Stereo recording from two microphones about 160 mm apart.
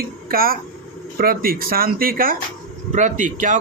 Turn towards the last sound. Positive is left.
turn(degrees=-55)  # may be behind; listen again after turning